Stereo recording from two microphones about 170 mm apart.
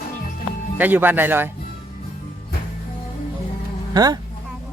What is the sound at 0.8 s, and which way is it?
Speech, 10° right (ahead or behind).